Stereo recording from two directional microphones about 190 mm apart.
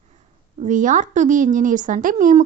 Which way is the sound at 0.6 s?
40° right (ahead or behind).